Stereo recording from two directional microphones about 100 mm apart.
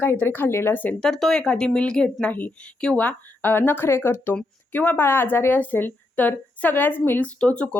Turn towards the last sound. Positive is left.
turn(degrees=10)  # may be behind; listen again after turning